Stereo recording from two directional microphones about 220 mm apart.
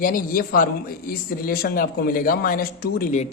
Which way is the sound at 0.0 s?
40° left (ahead or behind).